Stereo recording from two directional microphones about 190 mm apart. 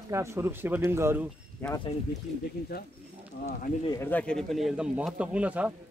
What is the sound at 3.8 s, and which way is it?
Speech, 20° left (ahead or behind).